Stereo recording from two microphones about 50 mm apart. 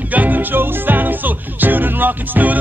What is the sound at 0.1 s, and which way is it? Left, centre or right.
Music, right.